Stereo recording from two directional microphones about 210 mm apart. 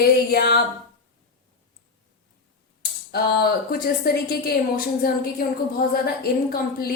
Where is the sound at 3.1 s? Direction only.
50° left (ahead or behind).